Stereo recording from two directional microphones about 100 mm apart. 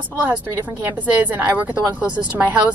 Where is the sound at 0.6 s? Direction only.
15° right (ahead or behind).